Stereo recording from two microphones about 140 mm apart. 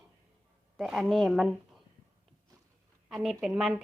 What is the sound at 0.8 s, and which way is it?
Speech, centre (ahead or behind).